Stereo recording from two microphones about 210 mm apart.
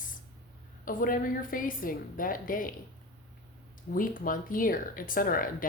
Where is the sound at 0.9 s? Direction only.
40° left (ahead or behind).